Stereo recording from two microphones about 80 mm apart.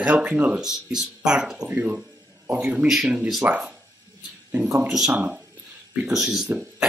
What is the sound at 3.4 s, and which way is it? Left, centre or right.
Speech, centre.